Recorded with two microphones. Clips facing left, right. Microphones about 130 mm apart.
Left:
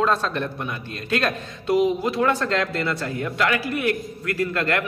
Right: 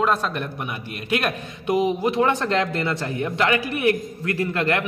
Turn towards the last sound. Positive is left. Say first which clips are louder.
# right 1 dB
turn(degrees=-20)  # may be behind; listen again after turning